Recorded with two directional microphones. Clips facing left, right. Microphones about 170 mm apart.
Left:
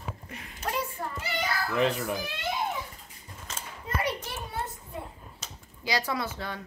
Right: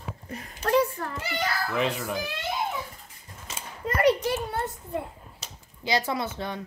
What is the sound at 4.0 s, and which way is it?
Children playing, 75° right (ahead or behind).